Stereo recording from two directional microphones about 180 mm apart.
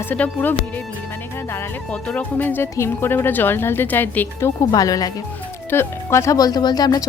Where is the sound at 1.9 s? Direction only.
5° left (ahead or behind).